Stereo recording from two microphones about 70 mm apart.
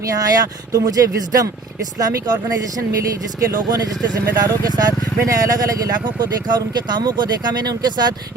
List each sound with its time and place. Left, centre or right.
0.1 s speech: right
2.0 s speech: right
3.5 s speech: right
6.1 s speech: right